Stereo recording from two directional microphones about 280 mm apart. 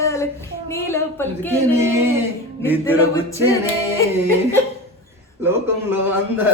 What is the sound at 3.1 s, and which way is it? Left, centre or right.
Speech, centre.